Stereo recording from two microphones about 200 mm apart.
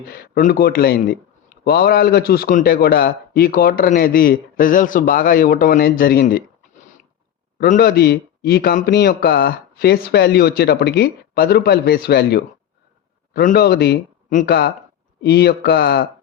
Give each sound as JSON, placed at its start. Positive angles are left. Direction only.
{"t": 0.1, "sound": "a man's voice", "side_deg": 45}
{"t": 7.6, "sound": "a man's voice", "side_deg": 50}